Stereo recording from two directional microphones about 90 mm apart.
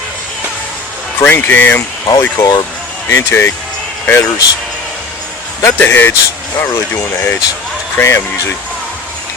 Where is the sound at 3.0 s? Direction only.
25° left (ahead or behind).